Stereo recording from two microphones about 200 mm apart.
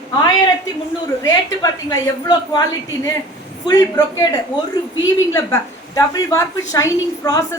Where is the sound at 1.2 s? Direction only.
15° left (ahead or behind).